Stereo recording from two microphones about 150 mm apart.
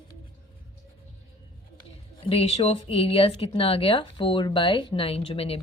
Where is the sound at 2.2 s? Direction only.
40° left (ahead or behind).